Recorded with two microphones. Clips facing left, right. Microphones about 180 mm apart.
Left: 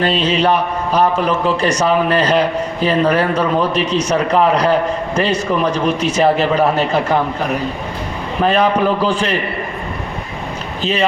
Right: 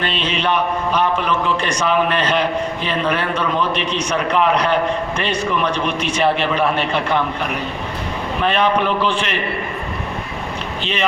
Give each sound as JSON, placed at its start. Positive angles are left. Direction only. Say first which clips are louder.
{"t": 0.0, "sound": "a man's voice", "louder": "left 6 dB", "side_deg": 40}